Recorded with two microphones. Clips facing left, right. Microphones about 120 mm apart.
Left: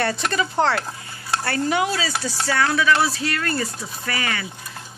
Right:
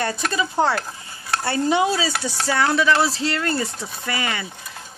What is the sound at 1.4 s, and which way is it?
Speech, 25° right (ahead or behind).